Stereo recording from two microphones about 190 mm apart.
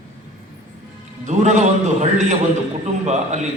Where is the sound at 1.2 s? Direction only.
40° right (ahead or behind).